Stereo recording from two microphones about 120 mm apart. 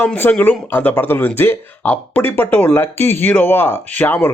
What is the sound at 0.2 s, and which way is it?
Speech, 15° left (ahead or behind).